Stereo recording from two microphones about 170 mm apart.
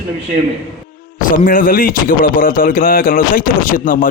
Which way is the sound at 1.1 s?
55° left (ahead or behind).